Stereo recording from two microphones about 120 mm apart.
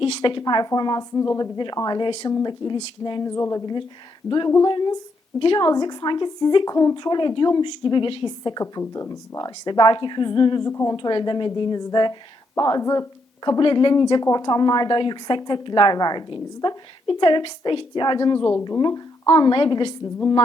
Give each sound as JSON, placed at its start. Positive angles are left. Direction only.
{"t": 0.0, "sound": "a woman's voice", "side_deg": 45}
{"t": 8.8, "sound": "a woman's voice", "side_deg": 25}
{"t": 10.7, "sound": "speech", "side_deg": 25}
{"t": 10.9, "sound": "a woman's voice", "side_deg": 40}
{"t": 13.6, "sound": "a woman's voice", "side_deg": 45}